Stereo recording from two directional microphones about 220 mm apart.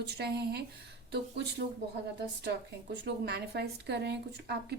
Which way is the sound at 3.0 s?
50° right (ahead or behind).